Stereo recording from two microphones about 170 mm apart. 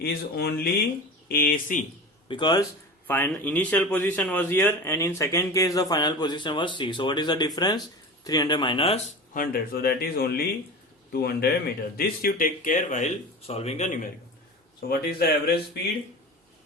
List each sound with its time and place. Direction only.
0.0 s speech: 65° left (ahead or behind)
2.2 s speech: 25° left (ahead or behind)
3.1 s a man's voice: 10° left (ahead or behind); by 9.0 s 30° left (ahead or behind)
9.3 s speech: 60° left (ahead or behind)
14.8 s speech: 65° left (ahead or behind)